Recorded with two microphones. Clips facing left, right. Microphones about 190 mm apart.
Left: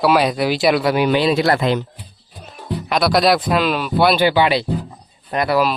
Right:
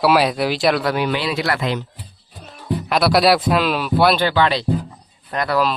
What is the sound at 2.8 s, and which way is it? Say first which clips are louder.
Speech: even; centre (ahead or behind).